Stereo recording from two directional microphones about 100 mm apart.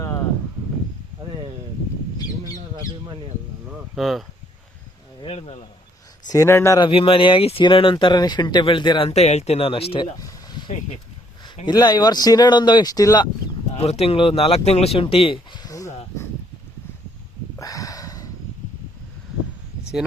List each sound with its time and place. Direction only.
0.0 s a sound: 35° left (ahead or behind)
3.9 s speech: centre (ahead or behind)
5.2 s speech: 75° left (ahead or behind)
6.2 s speech: 30° left (ahead or behind)
6.9 s speech: 65° left (ahead or behind)
7.6 s speech: 55° left (ahead or behind)
9.0 s speech: 90° left; by 10.0 s 70° left (ahead or behind)
10.0 s a sound: 40° left (ahead or behind)
11.4 s speech: 45° left (ahead or behind)
13.7 s speech: 85° left; by 15.4 s 65° left (ahead or behind)
15.5 s a sound: 35° left (ahead or behind)
17.6 s a sound: 35° left (ahead or behind)